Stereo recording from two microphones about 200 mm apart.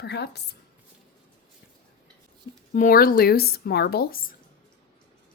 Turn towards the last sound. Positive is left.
turn(degrees=50)  # may be behind; listen again after turning